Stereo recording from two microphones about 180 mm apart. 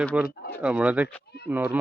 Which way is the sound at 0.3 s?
60° left (ahead or behind).